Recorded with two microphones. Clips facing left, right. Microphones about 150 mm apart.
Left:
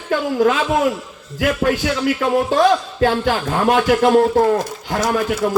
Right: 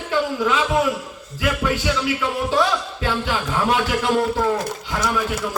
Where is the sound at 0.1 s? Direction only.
50° left (ahead or behind).